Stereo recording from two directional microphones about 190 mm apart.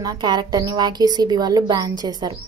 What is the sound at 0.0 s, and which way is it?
A woman's voice, 20° right (ahead or behind).